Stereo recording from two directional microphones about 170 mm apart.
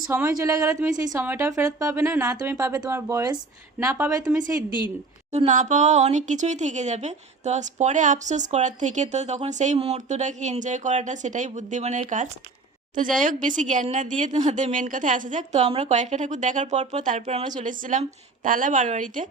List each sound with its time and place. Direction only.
0.1 s a woman's voice: 15° right (ahead or behind)
5.3 s speech: 40° right (ahead or behind)